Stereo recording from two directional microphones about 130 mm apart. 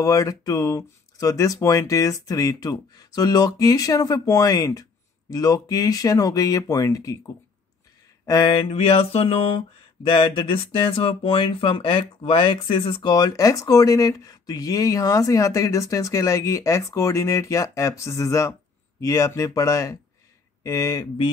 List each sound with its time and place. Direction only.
0.0 s speech: 25° left (ahead or behind)
8.3 s mantra: 35° left (ahead or behind)
10.0 s speech: 40° left (ahead or behind)
13.1 s speech: 30° left (ahead or behind)